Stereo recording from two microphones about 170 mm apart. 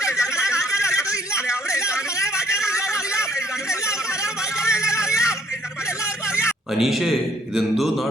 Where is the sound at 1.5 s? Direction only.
15° left (ahead or behind).